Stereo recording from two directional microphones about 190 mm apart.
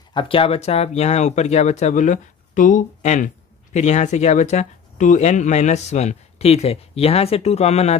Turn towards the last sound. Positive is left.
turn(degrees=35)  # may be behind; listen again after turning